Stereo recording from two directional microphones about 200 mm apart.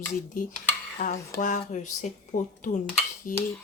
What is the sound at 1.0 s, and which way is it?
Speech, 35° left (ahead or behind).